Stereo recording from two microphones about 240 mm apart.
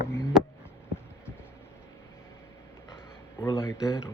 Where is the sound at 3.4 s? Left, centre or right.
Centre.